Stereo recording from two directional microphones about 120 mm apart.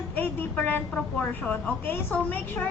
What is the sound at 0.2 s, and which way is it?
Vehicle, 15° left (ahead or behind).